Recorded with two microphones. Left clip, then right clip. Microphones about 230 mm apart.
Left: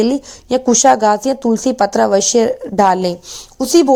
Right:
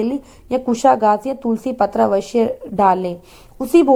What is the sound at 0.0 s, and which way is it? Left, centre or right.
Speech, left.